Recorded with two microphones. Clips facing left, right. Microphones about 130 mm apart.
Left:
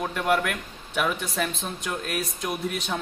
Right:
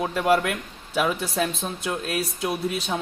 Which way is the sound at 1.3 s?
10° right (ahead or behind).